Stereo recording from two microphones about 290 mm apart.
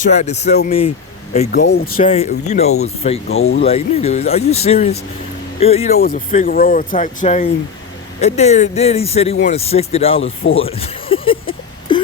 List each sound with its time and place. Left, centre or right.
0.1 s speech: left
1.5 s speech: left
2.0 s speech: left
10.5 s a sound: centre